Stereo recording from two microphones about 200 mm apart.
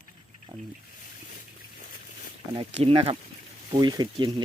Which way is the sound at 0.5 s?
15° right (ahead or behind).